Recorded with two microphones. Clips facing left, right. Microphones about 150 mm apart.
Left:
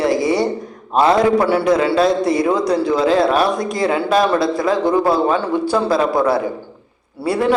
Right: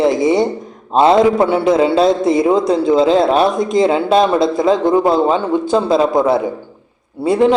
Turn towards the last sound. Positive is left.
turn(degrees=-20)  # may be behind; listen again after turning